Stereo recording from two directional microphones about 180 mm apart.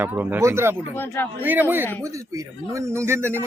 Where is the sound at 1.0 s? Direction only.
10° left (ahead or behind).